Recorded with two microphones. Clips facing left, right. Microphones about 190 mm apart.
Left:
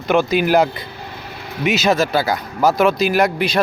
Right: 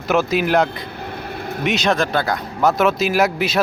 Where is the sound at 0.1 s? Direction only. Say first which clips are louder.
Left 2 dB; centre (ahead or behind).